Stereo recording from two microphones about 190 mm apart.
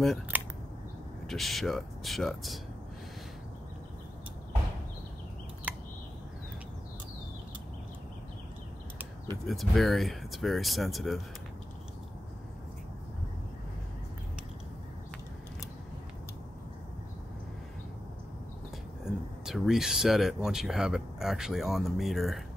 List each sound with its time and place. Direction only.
0.0 s speech: centre (ahead or behind)
5.7 s a sound: 10° right (ahead or behind)
9.5 s speech: centre (ahead or behind)
19.4 s speech: centre (ahead or behind)